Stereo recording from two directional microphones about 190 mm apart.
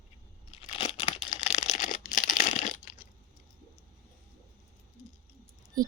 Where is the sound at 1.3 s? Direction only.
40° left (ahead or behind).